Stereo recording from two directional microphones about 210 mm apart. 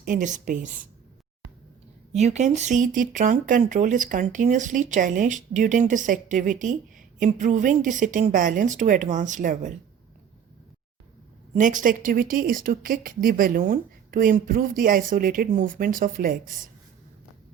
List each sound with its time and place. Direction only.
0.0 s speech: 40° right (ahead or behind)
2.1 s speech: 30° right (ahead or behind)
11.5 s speech: 40° right (ahead or behind)